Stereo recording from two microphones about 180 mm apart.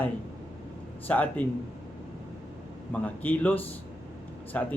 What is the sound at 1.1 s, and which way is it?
Speech, 10° left (ahead or behind).